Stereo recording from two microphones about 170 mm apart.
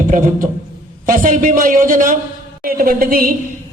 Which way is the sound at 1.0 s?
50° right (ahead or behind).